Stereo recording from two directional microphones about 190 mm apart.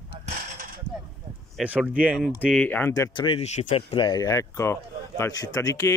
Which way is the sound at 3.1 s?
30° left (ahead or behind).